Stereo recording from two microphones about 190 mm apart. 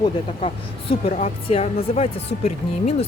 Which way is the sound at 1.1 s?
40° left (ahead or behind).